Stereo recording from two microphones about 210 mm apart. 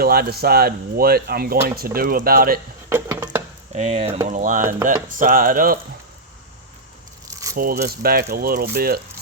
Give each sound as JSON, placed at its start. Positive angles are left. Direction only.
{"t": 0.0, "sound": "speech", "side_deg": -45}
{"t": 2.9, "sound": "a sound", "side_deg": -10}
{"t": 3.8, "sound": "speech", "side_deg": -35}
{"t": 7.3, "sound": "keys jangling", "side_deg": -15}
{"t": 7.5, "sound": "speech", "side_deg": -45}